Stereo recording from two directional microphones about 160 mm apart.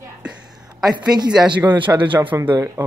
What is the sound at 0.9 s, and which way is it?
A man's voice, 25° right (ahead or behind).